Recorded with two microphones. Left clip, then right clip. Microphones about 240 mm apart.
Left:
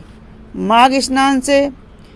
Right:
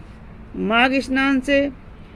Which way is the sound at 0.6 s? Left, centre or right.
Centre.